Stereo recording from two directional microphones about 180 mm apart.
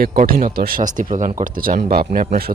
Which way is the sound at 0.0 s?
50° right (ahead or behind).